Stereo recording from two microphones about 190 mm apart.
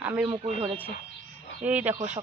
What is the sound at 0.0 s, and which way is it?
Speech, 5° right (ahead or behind).